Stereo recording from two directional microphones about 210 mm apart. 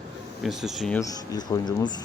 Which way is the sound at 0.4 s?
Centre (ahead or behind).